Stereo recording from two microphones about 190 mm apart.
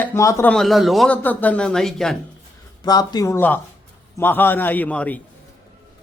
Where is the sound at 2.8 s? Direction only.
20° left (ahead or behind).